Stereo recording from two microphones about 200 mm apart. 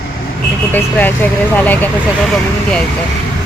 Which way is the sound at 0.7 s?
10° left (ahead or behind).